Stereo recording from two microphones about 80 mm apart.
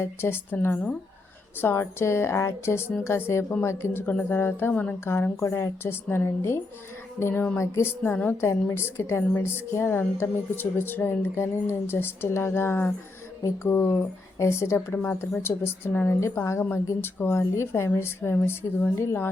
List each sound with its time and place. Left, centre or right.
0.0 s a woman's voice: left
14.9 s speech: centre
15.4 s a woman's voice: left
16.2 s a woman's voice: left